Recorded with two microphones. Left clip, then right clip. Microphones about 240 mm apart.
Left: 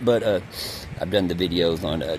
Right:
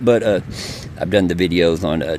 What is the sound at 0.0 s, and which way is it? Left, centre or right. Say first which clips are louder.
Speech: right 5 dB; right.